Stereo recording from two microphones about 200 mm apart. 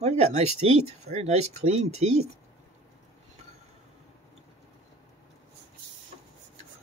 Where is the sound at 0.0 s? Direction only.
30° right (ahead or behind).